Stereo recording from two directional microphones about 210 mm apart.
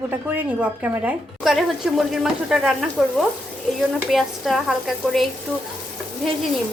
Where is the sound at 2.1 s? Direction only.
Centre (ahead or behind).